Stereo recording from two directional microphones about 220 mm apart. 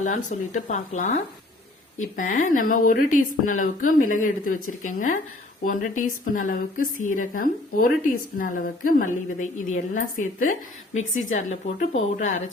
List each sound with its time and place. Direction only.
0.3 s a woman's voice: 35° left (ahead or behind)